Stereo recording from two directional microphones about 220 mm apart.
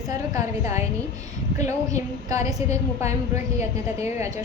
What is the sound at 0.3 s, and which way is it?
Speech, 15° right (ahead or behind).